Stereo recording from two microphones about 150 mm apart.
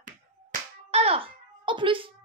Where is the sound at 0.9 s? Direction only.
40° right (ahead or behind).